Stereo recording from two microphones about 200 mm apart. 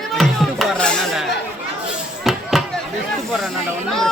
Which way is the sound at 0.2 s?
Centre (ahead or behind).